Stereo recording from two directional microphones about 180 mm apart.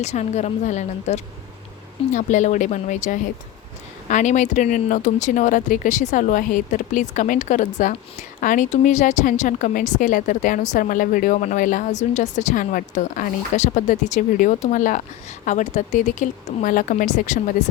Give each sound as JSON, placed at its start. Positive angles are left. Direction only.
{"t": 0.0, "sound": "a woman's voice", "side_deg": 40}